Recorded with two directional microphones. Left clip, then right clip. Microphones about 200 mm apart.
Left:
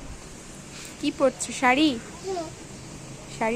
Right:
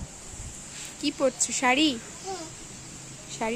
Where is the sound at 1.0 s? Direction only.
20° right (ahead or behind).